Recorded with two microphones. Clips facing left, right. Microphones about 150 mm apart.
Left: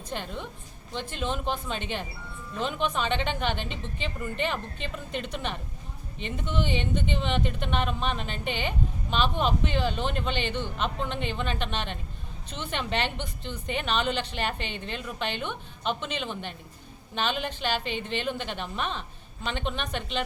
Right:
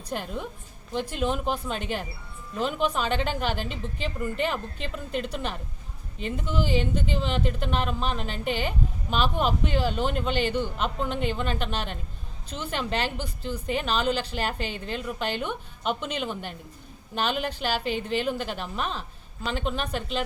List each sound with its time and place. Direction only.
0.1 s a woman's voice: 5° right (ahead or behind)
3.6 s a woman's voice: 40° right (ahead or behind)
4.2 s a woman's voice: 5° right (ahead or behind)
14.6 s a woman's voice: 40° right (ahead or behind)
14.9 s a woman's voice: 5° right (ahead or behind)